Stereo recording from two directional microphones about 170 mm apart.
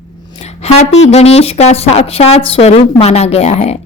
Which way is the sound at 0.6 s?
40° left (ahead or behind).